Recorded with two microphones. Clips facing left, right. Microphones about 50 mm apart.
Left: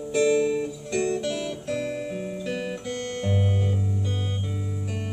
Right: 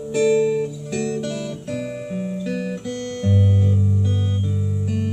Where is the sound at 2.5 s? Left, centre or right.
Left.